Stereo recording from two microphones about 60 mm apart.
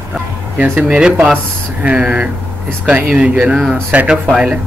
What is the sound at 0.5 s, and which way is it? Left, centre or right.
Speech, right.